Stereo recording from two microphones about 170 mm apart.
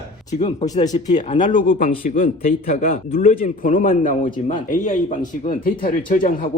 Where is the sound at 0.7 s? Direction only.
45° left (ahead or behind).